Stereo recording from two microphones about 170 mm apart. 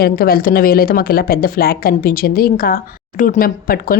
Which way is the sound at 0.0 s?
60° left (ahead or behind).